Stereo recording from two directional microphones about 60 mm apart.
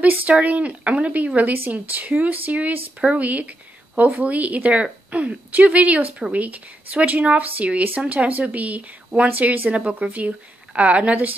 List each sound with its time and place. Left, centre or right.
0.0 s a woman's voice: right